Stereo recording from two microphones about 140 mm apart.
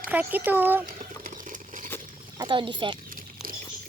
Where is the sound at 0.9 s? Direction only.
70° right (ahead or behind).